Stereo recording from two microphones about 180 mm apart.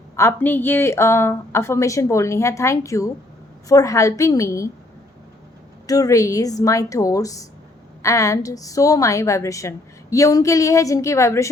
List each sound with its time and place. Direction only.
0.2 s a woman's voice: 10° left (ahead or behind)
5.8 s a woman's voice: 20° left (ahead or behind)